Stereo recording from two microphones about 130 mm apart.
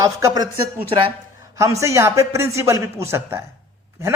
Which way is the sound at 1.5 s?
25° right (ahead or behind).